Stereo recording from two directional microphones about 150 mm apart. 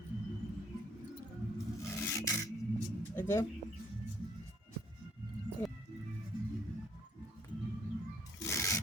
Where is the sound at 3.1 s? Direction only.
15° left (ahead or behind).